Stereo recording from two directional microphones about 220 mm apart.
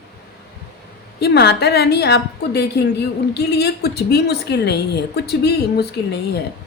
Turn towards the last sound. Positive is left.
turn(degrees=50)  # may be behind; listen again after turning